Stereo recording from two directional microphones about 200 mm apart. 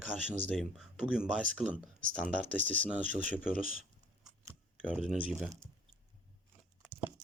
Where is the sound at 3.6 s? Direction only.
35° right (ahead or behind).